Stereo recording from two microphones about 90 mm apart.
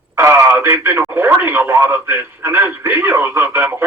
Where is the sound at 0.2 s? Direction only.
30° right (ahead or behind).